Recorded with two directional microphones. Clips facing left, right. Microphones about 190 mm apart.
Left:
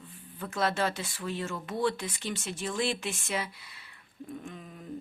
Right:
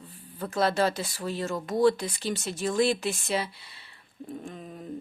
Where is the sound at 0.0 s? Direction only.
35° right (ahead or behind).